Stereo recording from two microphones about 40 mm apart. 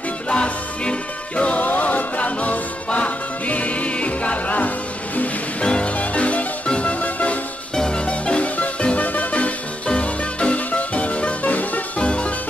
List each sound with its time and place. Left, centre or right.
0.3 s music: left
5.6 s music: left
7.7 s music: centre
8.1 s music: left
12.0 s music: left